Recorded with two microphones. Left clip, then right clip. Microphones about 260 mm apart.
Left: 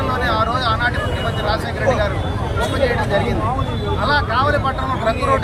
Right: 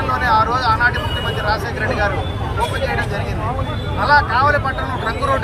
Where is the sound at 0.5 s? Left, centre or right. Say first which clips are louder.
Right 3 dB; centre.